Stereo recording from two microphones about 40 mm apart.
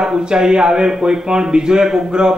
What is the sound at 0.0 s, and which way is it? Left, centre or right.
A man's voice, centre.